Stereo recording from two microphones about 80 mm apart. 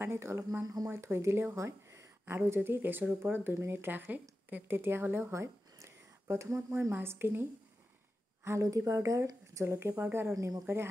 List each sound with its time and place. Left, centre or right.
0.0 s a woman's voice: right
8.5 s speech: right